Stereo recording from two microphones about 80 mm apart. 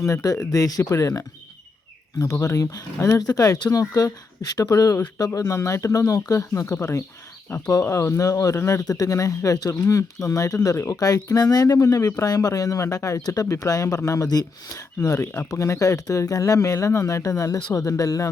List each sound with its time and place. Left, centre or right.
0.0 s speech: left
2.3 s speech: left
6.7 s speech: left
8.8 s speech: left